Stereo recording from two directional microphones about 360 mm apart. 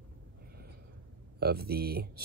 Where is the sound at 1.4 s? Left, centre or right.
Right.